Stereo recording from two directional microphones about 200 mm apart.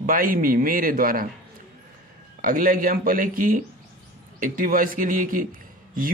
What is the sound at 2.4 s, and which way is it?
A man's voice, 45° right (ahead or behind).